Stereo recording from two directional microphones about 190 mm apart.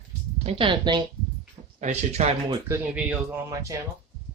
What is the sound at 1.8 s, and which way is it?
Speech, 35° right (ahead or behind).